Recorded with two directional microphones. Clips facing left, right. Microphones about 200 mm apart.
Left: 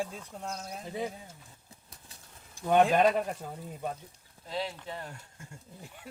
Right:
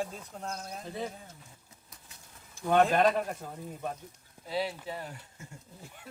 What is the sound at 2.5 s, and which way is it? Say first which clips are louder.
Speech: left 1 dB; 15° left (ahead or behind).